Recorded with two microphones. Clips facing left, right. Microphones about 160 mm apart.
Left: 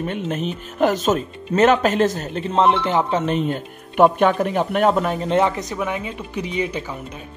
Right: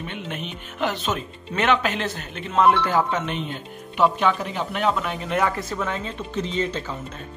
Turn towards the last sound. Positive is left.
turn(degrees=10)  # may be behind; listen again after turning